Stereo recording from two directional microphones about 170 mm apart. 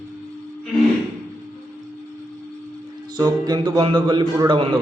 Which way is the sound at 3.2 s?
25° right (ahead or behind).